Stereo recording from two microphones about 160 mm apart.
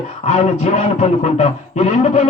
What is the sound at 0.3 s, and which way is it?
Speech, 50° left (ahead or behind).